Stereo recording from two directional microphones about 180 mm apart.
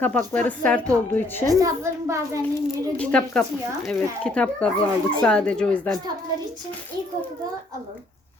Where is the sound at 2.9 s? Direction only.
5° left (ahead or behind).